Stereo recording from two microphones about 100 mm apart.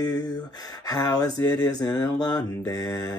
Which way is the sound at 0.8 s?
40° left (ahead or behind).